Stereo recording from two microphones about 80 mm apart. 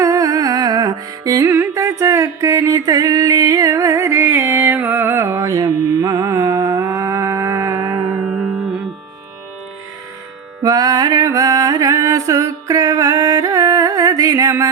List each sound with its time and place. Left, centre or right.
0.0 s music: right
1.5 s music: right
6.7 s a sound: right
8.1 s music: centre
10.6 s music: right